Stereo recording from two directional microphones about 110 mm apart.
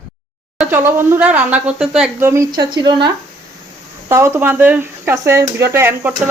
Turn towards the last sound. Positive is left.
turn(degrees=-20)  # may be behind; listen again after turning